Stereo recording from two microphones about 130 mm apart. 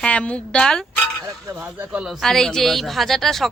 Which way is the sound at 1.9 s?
5° right (ahead or behind).